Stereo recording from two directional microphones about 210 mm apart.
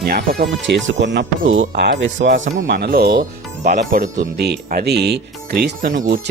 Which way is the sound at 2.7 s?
45° right (ahead or behind).